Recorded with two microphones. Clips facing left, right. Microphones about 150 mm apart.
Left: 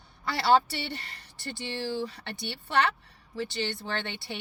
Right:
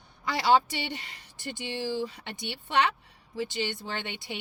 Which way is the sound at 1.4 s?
15° right (ahead or behind).